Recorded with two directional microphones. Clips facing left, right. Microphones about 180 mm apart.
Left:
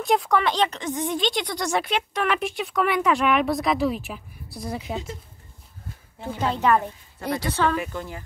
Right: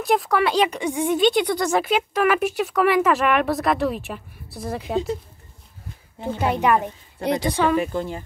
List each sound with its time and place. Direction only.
0.0 s speech: centre (ahead or behind)
6.2 s a woman's voice: 15° right (ahead or behind)
7.8 s a woman's voice: 30° right (ahead or behind)